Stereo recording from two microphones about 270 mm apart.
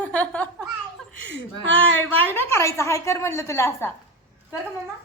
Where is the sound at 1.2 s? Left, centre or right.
Right.